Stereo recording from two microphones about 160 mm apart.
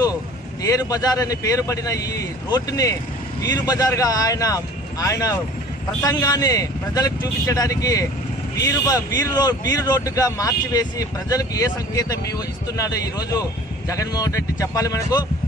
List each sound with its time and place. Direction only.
0.6 s speech: 20° left (ahead or behind)